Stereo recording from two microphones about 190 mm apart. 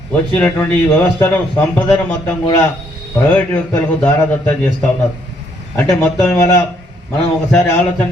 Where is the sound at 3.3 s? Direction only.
10° left (ahead or behind).